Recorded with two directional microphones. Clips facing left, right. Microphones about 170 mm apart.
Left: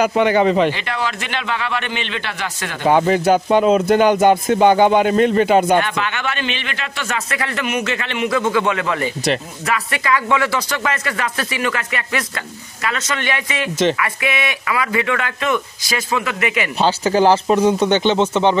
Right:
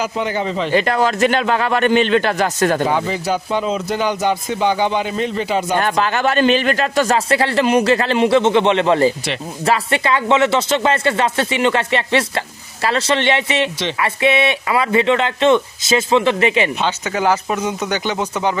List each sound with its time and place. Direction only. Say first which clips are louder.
0.0 s speech: left 6 dB; 65° left (ahead or behind)
0.7 s a man's voice: right 8 dB; 45° right (ahead or behind)
2.9 s speech: left 5 dB; 60° left (ahead or behind)
5.8 s a man's voice: right 3 dB; 40° right (ahead or behind)
16.8 s speech: left 4 dB; 30° left (ahead or behind)